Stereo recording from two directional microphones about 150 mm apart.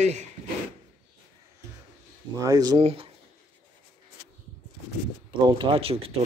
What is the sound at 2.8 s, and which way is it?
Speech, 40° right (ahead or behind).